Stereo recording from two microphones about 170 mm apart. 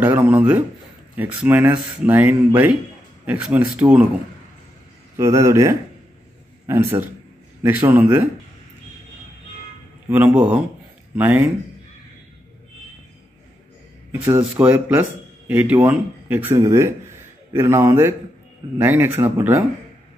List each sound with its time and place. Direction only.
0.0 s speech: 10° right (ahead or behind)
5.1 s speech: 15° right (ahead or behind)
10.0 s speech: 10° right (ahead or behind)
14.4 s speech: 10° right (ahead or behind)